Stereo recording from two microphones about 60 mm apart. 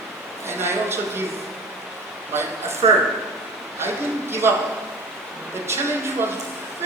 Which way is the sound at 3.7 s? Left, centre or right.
Right.